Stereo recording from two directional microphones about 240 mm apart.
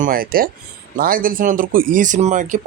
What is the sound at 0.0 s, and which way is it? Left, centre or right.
Speech, right.